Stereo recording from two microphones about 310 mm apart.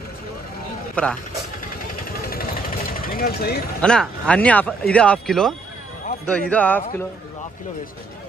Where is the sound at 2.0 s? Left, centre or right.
Left.